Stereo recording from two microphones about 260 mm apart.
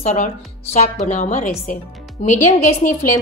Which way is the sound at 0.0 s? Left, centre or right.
Left.